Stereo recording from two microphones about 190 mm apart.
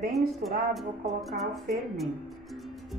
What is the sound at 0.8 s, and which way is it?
Music, centre (ahead or behind).